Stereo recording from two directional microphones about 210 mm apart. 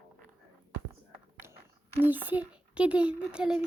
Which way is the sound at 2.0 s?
10° right (ahead or behind).